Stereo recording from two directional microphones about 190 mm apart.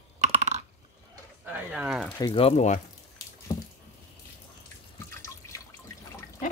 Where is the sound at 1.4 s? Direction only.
5° right (ahead or behind).